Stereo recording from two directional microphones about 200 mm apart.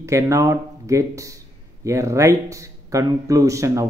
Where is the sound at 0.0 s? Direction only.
15° right (ahead or behind).